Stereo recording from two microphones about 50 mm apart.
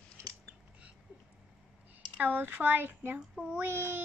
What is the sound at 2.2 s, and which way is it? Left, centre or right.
Speech, right.